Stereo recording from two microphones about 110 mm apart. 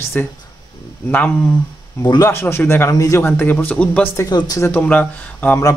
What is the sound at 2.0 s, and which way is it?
Speech, 35° left (ahead or behind).